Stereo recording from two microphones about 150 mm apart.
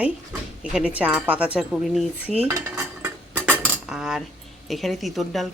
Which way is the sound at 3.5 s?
5° right (ahead or behind).